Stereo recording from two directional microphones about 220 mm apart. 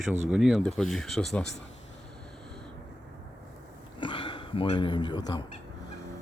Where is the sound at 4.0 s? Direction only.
20° left (ahead or behind).